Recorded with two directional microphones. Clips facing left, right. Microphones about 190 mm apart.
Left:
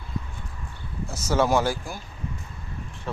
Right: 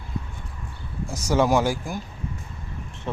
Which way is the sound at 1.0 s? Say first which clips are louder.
Right 2 dB; 15° right (ahead or behind).